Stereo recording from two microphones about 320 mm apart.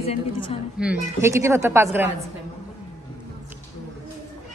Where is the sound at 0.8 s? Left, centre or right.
Centre.